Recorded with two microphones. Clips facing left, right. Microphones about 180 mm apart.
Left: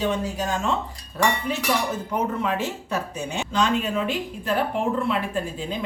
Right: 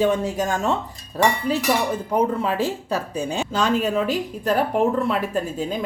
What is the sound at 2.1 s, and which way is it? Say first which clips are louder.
Speech: right 4 dB; 30° right (ahead or behind).